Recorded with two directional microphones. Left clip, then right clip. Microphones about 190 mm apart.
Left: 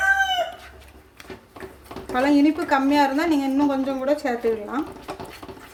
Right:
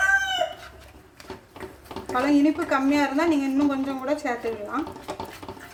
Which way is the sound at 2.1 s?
50° left (ahead or behind).